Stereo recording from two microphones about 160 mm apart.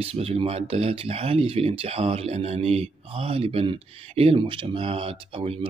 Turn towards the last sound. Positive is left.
turn(degrees=-35)  # may be behind; listen again after turning